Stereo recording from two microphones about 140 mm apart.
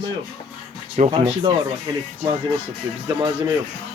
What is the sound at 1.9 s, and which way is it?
Speech, 30° right (ahead or behind).